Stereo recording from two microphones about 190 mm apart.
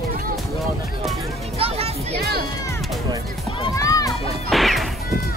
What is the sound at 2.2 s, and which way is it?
Music, 55° right (ahead or behind).